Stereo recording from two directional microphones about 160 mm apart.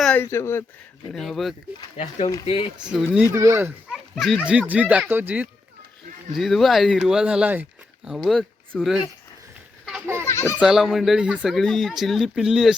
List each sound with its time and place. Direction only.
0.0 s speech: 10° left (ahead or behind)
1.1 s speech: centre (ahead or behind)
2.0 s speech: 40° left (ahead or behind)
2.9 s speech: 5° left (ahead or behind)
3.3 s speech: 15° right (ahead or behind)
3.9 s speech: centre (ahead or behind)
6.3 s speech: centre (ahead or behind)
10.2 s children playing: 15° left (ahead or behind)
10.6 s speech: centre (ahead or behind)